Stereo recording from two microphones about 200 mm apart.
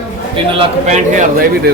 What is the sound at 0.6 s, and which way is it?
Speech, 35° right (ahead or behind).